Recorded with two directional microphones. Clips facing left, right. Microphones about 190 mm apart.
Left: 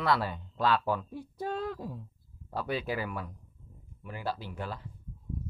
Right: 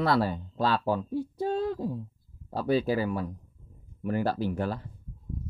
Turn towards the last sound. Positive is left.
turn(degrees=-40)  # may be behind; listen again after turning